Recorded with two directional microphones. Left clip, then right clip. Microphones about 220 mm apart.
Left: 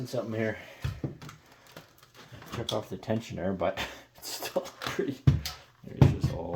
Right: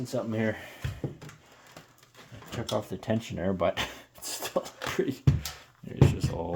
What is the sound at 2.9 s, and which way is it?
Speech, 30° right (ahead or behind).